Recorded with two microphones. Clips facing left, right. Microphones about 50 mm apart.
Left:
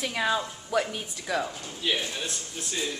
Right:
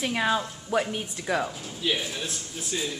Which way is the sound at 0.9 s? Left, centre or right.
Right.